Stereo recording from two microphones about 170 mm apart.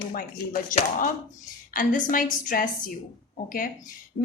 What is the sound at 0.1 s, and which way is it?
A woman's voice, 55° left (ahead or behind).